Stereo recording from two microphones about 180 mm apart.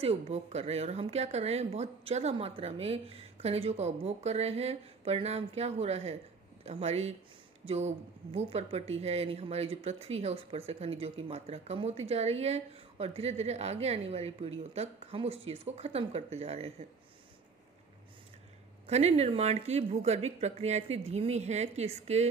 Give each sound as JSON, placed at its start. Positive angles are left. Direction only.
{"t": 0.0, "sound": "speech", "side_deg": -35}
{"t": 18.9, "sound": "speech", "side_deg": -35}